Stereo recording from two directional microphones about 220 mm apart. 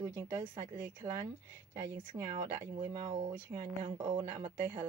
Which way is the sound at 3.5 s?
20° right (ahead or behind).